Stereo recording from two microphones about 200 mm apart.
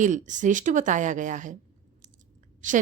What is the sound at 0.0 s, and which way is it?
A woman's voice, 40° right (ahead or behind).